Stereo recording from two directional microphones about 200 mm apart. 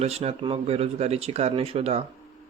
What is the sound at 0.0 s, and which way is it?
Speech, 30° right (ahead or behind).